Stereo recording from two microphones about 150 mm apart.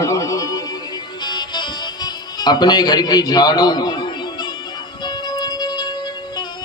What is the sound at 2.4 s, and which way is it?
Mantra, 30° left (ahead or behind).